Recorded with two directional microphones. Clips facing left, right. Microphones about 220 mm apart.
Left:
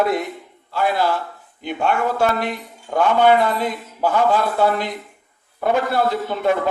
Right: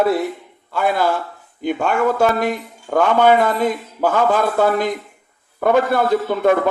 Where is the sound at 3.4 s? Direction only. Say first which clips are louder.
Right 3 dB; 45° right (ahead or behind).